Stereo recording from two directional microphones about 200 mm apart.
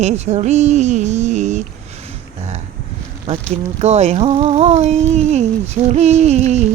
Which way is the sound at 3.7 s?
35° right (ahead or behind).